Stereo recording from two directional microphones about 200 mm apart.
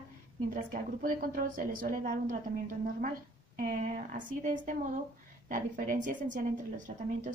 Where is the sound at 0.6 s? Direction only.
45° right (ahead or behind).